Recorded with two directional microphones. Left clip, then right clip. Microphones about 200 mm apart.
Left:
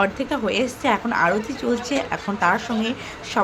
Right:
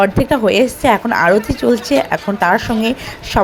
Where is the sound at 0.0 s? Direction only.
30° right (ahead or behind).